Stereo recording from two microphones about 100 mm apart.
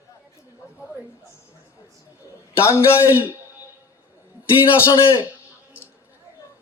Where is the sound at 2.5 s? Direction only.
25° left (ahead or behind).